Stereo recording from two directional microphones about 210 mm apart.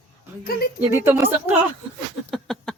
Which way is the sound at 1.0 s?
10° right (ahead or behind).